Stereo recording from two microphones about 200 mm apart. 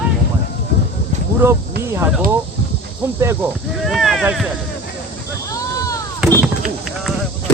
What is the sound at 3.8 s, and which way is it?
Speech, centre (ahead or behind).